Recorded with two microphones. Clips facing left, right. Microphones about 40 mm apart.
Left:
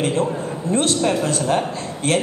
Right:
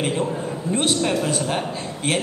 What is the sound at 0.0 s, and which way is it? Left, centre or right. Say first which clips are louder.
A man's voice: left 3 dB; centre.